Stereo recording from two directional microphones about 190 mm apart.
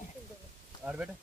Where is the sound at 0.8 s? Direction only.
5° right (ahead or behind).